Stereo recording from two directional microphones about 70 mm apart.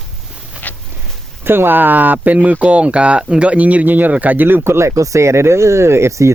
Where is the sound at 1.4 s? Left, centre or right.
Right.